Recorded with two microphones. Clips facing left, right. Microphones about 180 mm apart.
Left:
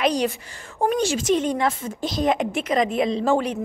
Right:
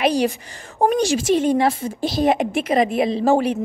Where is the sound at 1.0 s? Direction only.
10° right (ahead or behind).